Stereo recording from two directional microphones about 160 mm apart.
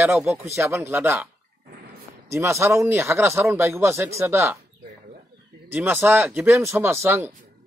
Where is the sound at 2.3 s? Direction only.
15° right (ahead or behind).